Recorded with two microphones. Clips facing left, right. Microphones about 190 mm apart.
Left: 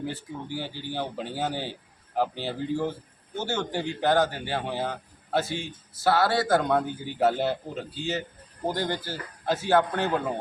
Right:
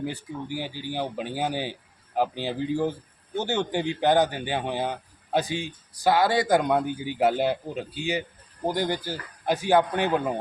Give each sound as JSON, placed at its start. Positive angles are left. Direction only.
{"t": 0.0, "sound": "a man's voice", "side_deg": -15}